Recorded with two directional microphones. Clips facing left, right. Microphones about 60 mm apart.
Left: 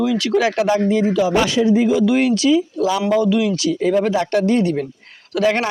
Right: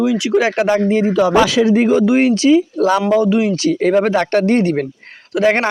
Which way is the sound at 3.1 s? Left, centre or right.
Right.